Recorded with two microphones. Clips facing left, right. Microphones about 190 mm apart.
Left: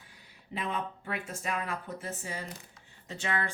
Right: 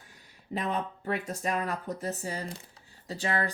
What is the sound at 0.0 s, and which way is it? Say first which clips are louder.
Speech: right 1 dB; 45° right (ahead or behind).